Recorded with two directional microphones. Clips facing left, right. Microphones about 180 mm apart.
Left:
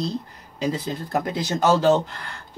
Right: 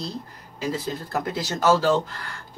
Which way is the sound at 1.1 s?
20° left (ahead or behind).